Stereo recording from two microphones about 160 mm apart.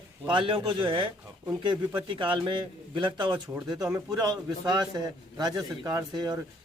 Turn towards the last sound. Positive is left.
turn(degrees=-25)  # may be behind; listen again after turning